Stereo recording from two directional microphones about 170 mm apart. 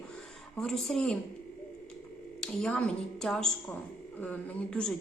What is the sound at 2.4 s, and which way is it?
A woman's voice, 5° left (ahead or behind).